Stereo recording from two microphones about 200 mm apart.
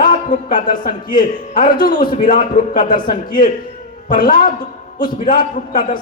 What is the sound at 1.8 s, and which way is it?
Speech, 45° left (ahead or behind).